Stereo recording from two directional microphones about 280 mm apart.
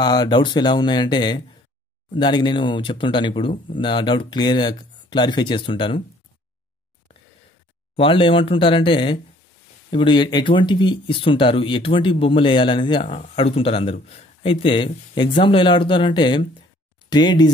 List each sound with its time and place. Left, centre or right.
0.0 s speech: centre
7.9 s speech: centre